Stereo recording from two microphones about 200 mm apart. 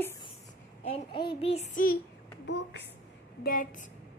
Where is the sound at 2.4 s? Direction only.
60° left (ahead or behind).